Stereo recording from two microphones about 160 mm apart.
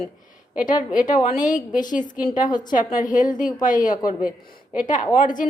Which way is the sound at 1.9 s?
55° left (ahead or behind).